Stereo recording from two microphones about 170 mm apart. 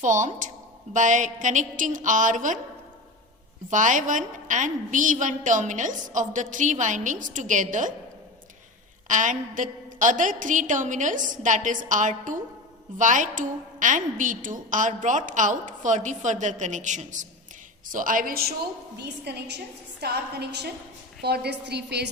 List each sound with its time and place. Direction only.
0.0 s a woman's voice: 45° right (ahead or behind)
3.7 s a woman's voice: 50° right (ahead or behind)
9.0 s a woman's voice: 50° right (ahead or behind)
18.9 s a woman's voice: 75° right (ahead or behind)